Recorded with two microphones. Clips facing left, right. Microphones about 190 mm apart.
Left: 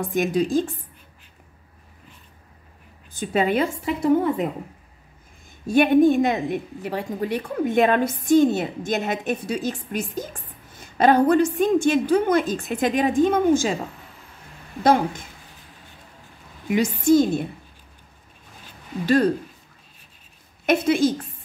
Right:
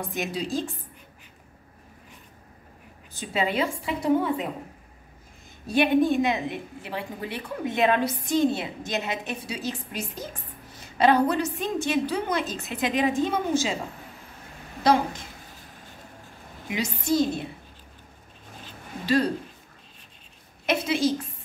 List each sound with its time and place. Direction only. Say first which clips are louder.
0.1 s a woman's voice: left 10 dB; 50° left (ahead or behind)
3.1 s a woman's voice: left 6 dB; 50° left (ahead or behind)
5.7 s a woman's voice: left 5 dB; 45° left (ahead or behind)
14.8 s a woman's voice: left 3 dB; 50° left (ahead or behind)
16.6 s a woman's voice: left 9 dB; 50° left (ahead or behind)
20.6 s a woman's voice: left 5 dB; 50° left (ahead or behind)